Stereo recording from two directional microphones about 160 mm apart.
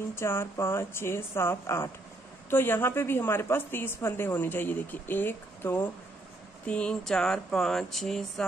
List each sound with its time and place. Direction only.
0.1 s a woman's voice: 15° left (ahead or behind)